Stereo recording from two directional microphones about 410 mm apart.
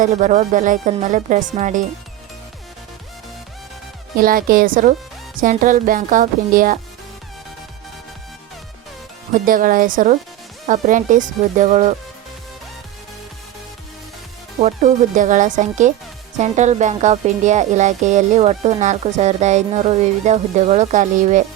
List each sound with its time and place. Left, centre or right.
0.0 s speech: centre
4.2 s a woman's voice: right
9.3 s a woman's voice: centre
14.6 s speech: centre